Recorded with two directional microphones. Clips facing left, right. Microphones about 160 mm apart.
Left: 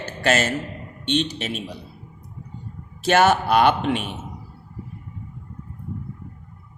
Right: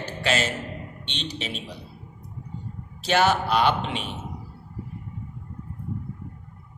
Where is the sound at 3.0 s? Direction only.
50° left (ahead or behind).